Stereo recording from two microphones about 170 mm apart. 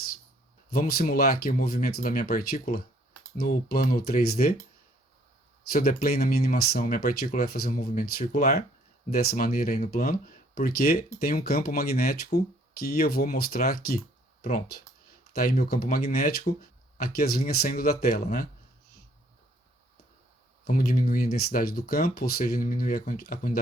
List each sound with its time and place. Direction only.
0.7 s speech: 60° left (ahead or behind)
5.7 s speech: 60° left (ahead or behind)
15.3 s speech: 60° left (ahead or behind)
20.7 s speech: 55° left (ahead or behind)